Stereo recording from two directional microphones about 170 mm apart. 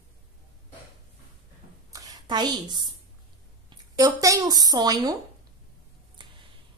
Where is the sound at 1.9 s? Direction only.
20° right (ahead or behind).